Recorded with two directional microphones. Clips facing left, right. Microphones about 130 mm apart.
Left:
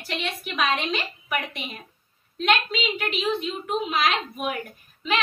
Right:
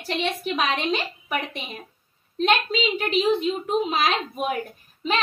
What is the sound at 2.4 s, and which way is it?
A woman's voice, 35° right (ahead or behind).